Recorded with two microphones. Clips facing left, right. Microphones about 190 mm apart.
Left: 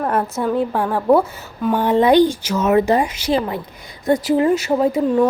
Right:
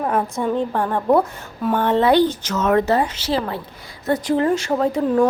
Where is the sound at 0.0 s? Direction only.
Centre (ahead or behind).